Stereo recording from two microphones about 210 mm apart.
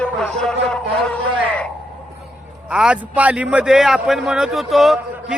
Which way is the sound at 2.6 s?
5° right (ahead or behind).